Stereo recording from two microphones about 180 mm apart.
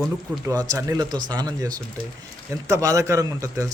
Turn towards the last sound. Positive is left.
turn(degrees=-20)  # may be behind; listen again after turning